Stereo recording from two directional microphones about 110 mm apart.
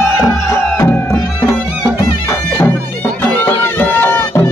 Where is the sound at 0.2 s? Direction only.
20° left (ahead or behind).